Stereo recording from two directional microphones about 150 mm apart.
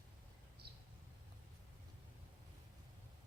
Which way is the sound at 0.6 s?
90° right.